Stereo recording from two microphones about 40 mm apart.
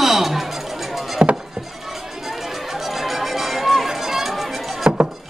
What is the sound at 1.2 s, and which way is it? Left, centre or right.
Rowboat, right.